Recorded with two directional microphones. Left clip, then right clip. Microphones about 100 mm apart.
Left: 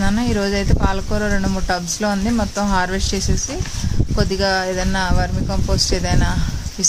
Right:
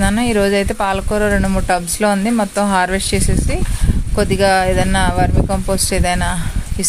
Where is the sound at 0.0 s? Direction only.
25° right (ahead or behind).